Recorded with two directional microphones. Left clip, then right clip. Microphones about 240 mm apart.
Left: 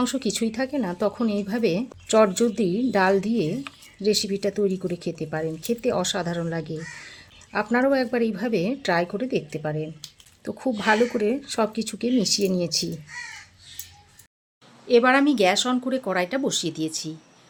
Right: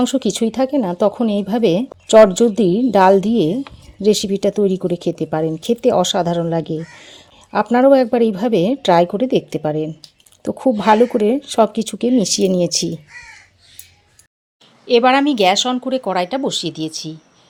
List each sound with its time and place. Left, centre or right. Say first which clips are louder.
0.0 s speech: right 8 dB; right
14.8 s speech: right 5 dB; centre